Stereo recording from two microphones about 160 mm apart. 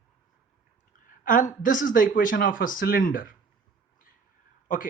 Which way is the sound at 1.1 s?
55° left (ahead or behind).